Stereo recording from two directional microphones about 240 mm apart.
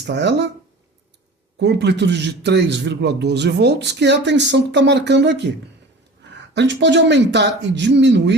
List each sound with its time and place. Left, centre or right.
0.0 s a man's voice: right
1.5 s a man's voice: right
6.5 s a man's voice: right